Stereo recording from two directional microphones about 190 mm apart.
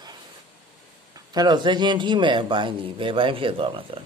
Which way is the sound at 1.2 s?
20° right (ahead or behind).